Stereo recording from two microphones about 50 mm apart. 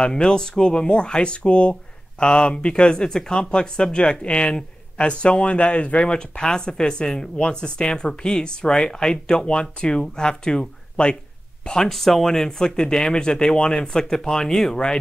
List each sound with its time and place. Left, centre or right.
0.0 s speech: centre